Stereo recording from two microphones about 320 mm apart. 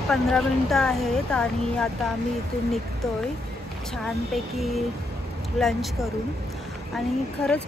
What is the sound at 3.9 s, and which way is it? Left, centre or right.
Speech, centre.